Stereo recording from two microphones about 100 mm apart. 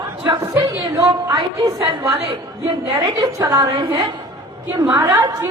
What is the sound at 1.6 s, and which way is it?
A woman's voice, 30° right (ahead or behind).